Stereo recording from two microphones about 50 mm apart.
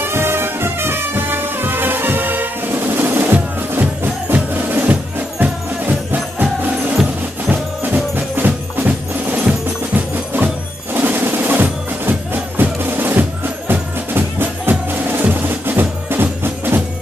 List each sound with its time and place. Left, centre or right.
0.0 s music: right
7.8 s music: right